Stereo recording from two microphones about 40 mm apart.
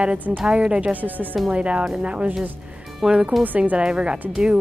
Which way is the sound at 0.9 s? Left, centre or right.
Right.